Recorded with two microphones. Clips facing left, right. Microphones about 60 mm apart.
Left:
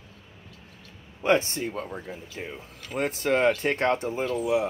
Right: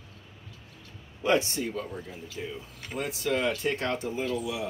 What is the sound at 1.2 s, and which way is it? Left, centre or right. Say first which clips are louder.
Speech: left 2 dB; left.